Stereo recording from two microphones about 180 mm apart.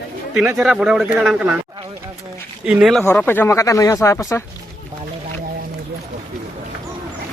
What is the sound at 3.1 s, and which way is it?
Speech, 10° left (ahead or behind).